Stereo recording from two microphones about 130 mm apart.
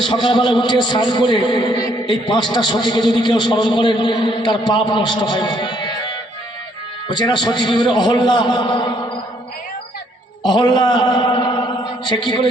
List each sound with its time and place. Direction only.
0.0 s a man's voice: 40° left (ahead or behind)
7.2 s a man's voice: 35° left (ahead or behind)
10.4 s a man's voice: 35° left (ahead or behind)